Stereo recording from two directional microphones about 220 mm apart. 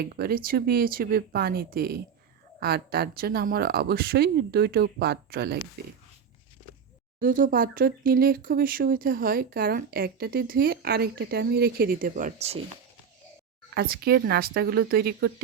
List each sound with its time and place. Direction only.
0.0 s speech: 45° right (ahead or behind)
7.2 s speech: 40° right (ahead or behind)
13.7 s speech: 45° right (ahead or behind)